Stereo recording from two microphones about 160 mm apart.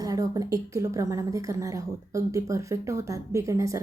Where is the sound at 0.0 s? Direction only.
20° right (ahead or behind).